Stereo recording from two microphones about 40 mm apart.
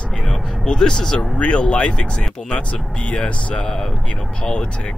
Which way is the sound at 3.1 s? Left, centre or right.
Left.